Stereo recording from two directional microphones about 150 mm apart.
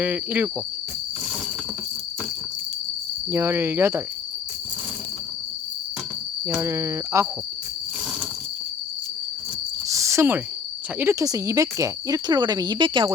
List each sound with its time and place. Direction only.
0.0 s speech: 10° right (ahead or behind)
3.3 s speech: 15° right (ahead or behind)
6.4 s speech: 20° right (ahead or behind)
9.9 s a sound: 20° right (ahead or behind)
11.0 s speech: 20° right (ahead or behind)